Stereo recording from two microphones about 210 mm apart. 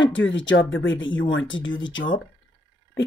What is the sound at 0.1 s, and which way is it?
Speech, 60° left (ahead or behind).